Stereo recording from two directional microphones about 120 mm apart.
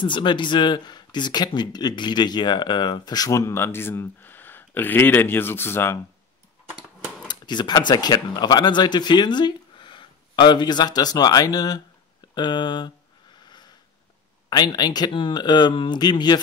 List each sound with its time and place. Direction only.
0.0 s speech: 40° left (ahead or behind); by 5.9 s 20° left (ahead or behind)
7.2 s speech: 40° left (ahead or behind)
13.4 s sniff: 35° left (ahead or behind)
14.5 s speech: 35° left (ahead or behind)